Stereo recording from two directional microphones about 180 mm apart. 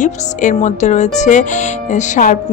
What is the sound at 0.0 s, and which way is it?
Speech, 45° left (ahead or behind).